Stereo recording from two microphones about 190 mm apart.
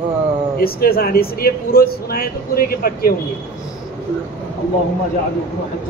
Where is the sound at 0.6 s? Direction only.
50° left (ahead or behind).